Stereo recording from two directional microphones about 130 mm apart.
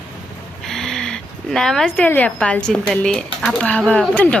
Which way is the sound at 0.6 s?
5° left (ahead or behind).